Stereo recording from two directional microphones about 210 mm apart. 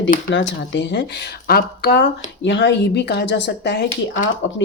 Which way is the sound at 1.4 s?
50° left (ahead or behind).